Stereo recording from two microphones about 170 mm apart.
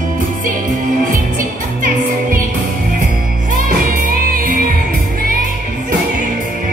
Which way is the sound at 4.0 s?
55° right (ahead or behind).